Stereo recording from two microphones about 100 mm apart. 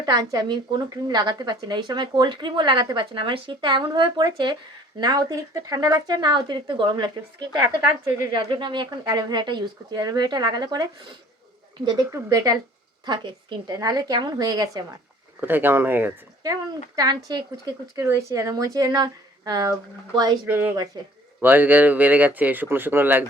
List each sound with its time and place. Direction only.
0.0 s a woman's voice: 40° right (ahead or behind)
7.6 s speech: 30° right (ahead or behind)
8.3 s a woman's voice: 50° right (ahead or behind)
11.9 s speech: 40° right (ahead or behind)
13.1 s a woman's voice: 50° right (ahead or behind)
13.7 s speech: 40° right (ahead or behind)
15.4 s speech: 20° right (ahead or behind)
16.4 s speech: 40° right (ahead or behind)
17.9 s speech: 30° right (ahead or behind)
20.4 s speech: 20° right (ahead or behind)
20.9 s a woman's voice: 45° right (ahead or behind)
21.4 s speech: 15° right (ahead or behind)